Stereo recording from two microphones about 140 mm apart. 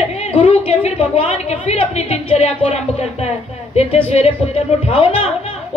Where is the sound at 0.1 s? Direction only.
45° left (ahead or behind).